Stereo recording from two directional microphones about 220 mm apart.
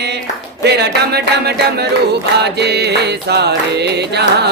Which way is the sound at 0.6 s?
45° right (ahead or behind).